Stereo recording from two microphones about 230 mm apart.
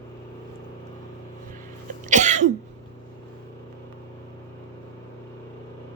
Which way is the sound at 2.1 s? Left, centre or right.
Right.